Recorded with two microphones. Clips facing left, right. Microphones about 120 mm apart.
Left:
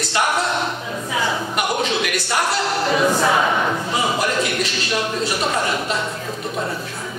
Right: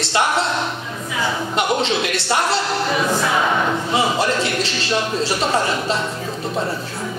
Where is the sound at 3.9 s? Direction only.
30° right (ahead or behind).